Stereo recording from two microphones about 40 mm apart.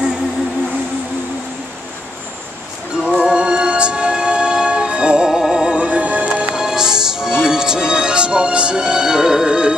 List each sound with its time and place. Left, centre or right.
3.2 s music: right
5.8 s music: right
6.5 s music: centre